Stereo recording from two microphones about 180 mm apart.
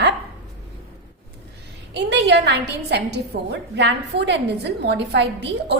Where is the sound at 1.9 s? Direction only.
75° right (ahead or behind).